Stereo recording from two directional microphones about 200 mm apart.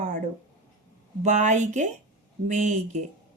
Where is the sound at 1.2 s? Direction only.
35° right (ahead or behind).